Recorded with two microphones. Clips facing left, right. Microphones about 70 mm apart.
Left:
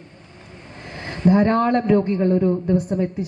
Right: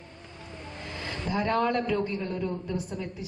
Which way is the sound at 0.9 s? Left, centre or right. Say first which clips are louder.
Left 14 dB; left.